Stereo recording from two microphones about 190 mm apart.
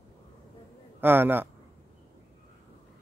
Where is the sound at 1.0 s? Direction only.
10° right (ahead or behind).